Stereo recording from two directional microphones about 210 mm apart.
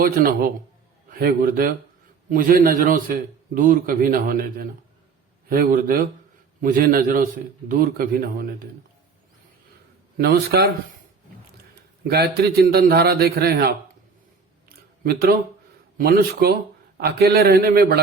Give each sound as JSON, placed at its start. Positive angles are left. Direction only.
{"t": 1.1, "sound": "a man's voice", "side_deg": -45}
{"t": 10.2, "sound": "a man's voice", "side_deg": -50}
{"t": 12.0, "sound": "a man's voice", "side_deg": -50}
{"t": 14.7, "sound": "a sound", "side_deg": -45}
{"t": 16.0, "sound": "a man's voice", "side_deg": -45}